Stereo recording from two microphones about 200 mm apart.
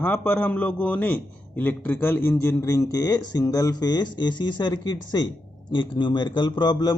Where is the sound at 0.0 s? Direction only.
10° left (ahead or behind).